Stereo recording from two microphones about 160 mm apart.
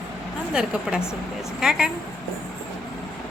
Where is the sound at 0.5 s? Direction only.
5° right (ahead or behind).